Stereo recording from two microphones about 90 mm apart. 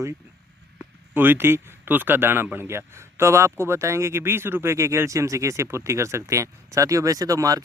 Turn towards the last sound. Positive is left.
turn(degrees=-40)  # may be behind; listen again after turning